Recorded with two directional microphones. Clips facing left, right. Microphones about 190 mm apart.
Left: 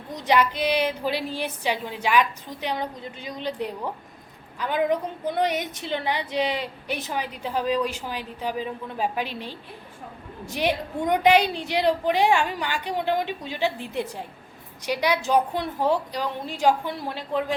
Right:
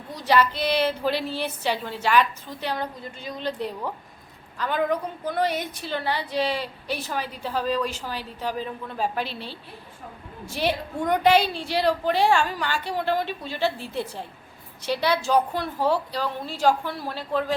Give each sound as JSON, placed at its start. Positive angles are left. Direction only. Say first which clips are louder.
{"t": 0.1, "sound": "a woman's voice", "louder": "even", "side_deg": 20}